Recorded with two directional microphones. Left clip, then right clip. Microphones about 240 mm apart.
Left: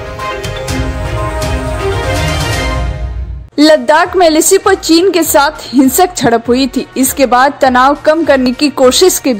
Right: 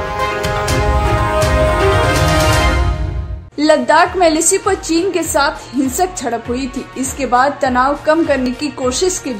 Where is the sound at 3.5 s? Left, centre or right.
Left.